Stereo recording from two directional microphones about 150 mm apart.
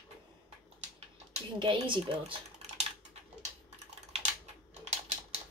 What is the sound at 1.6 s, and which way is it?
Speech, 35° right (ahead or behind).